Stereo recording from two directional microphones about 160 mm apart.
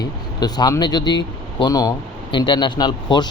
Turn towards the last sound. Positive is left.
turn(degrees=25)  # may be behind; listen again after turning